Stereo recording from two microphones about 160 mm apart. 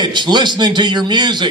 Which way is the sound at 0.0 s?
25° right (ahead or behind).